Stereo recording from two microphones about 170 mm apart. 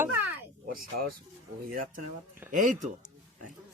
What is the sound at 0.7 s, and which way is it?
Speech, 60° right (ahead or behind).